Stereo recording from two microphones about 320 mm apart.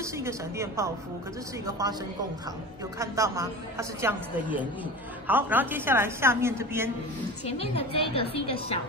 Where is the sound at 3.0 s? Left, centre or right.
Centre.